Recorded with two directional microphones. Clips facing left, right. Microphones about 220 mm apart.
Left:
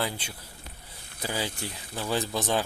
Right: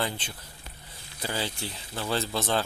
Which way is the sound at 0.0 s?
10° left (ahead or behind).